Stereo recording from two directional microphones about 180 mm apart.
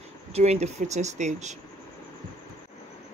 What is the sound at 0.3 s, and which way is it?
Speech, 35° right (ahead or behind).